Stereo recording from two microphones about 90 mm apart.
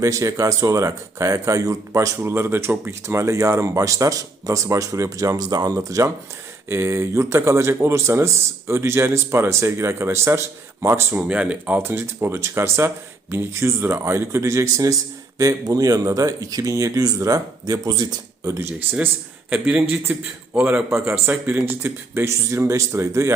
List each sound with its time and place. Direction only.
0.0 s speech: 35° right (ahead or behind)
11.2 s speech: 15° right (ahead or behind)
11.8 s speech: 25° right (ahead or behind)
18.6 s speech: 20° right (ahead or behind)
20.9 s speech: 30° right (ahead or behind)